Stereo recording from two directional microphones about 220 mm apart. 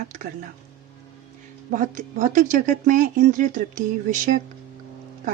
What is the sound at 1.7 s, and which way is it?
Speech, 35° right (ahead or behind).